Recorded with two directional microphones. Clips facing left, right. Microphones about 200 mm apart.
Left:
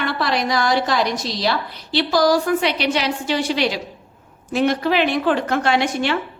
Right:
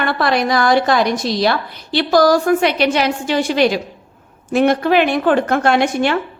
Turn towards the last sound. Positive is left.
turn(degrees=-50)  # may be behind; listen again after turning